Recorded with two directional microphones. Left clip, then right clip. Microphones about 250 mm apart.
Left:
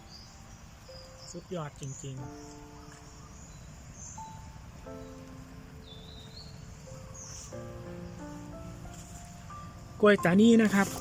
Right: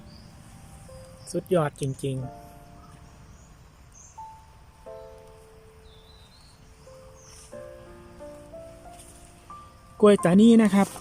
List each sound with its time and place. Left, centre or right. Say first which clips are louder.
1.3 s speech: right 16 dB; right
10.0 s speech: right 5 dB; centre